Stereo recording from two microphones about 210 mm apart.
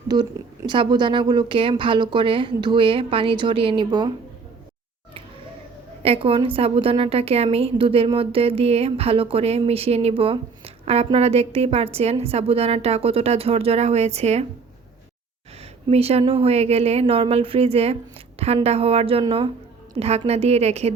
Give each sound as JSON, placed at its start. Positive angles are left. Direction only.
{"t": 0.1, "sound": "a woman's voice", "side_deg": -20}
{"t": 6.0, "sound": "a woman's voice", "side_deg": -25}
{"t": 15.9, "sound": "a woman's voice", "side_deg": -30}